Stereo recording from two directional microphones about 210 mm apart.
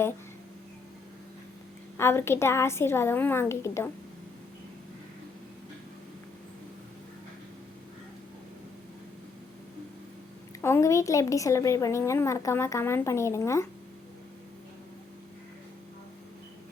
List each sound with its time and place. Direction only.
2.0 s a woman's voice: 10° left (ahead or behind)
10.6 s a woman's voice: 15° left (ahead or behind)